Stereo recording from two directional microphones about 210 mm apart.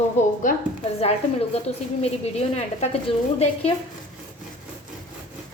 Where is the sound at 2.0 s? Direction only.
30° left (ahead or behind).